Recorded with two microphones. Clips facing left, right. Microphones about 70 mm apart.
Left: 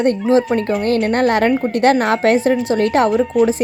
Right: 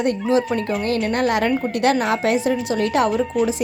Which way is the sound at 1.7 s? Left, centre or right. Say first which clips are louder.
Left 4 dB; left.